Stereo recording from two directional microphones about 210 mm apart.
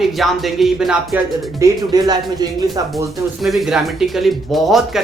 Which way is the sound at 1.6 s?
20° right (ahead or behind).